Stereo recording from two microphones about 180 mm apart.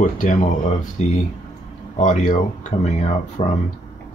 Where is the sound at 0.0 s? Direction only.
45° left (ahead or behind).